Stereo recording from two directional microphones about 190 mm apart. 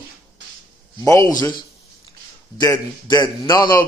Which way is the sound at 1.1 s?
15° left (ahead or behind).